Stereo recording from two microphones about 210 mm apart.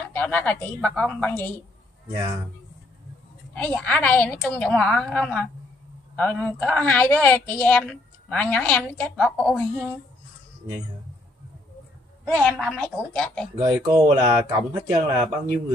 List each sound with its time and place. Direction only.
0.1 s a woman's voice: 5° left (ahead or behind)
3.5 s a woman's voice: 5° left (ahead or behind)
12.3 s a woman's voice: 5° left (ahead or behind)
13.6 s speech: 15° right (ahead or behind)